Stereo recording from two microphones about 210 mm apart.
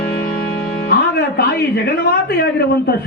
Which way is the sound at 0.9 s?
50° left (ahead or behind).